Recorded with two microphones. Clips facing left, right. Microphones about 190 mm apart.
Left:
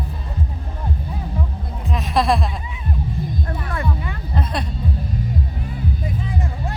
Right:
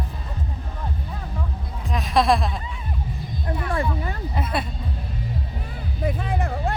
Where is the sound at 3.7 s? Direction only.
35° right (ahead or behind).